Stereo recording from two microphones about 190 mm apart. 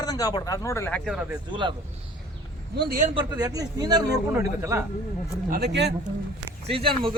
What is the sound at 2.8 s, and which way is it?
Speech, 50° right (ahead or behind).